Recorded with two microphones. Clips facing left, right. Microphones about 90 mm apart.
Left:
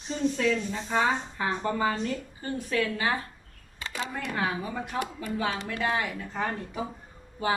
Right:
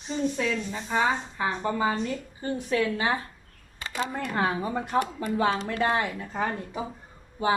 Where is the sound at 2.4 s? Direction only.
25° right (ahead or behind).